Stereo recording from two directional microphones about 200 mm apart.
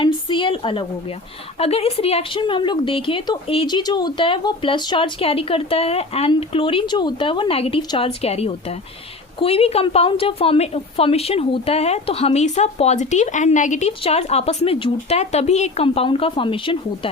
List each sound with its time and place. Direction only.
0.0 s a woman's voice: 25° left (ahead or behind)